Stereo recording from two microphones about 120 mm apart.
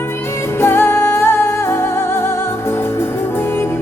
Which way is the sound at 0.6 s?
20° left (ahead or behind).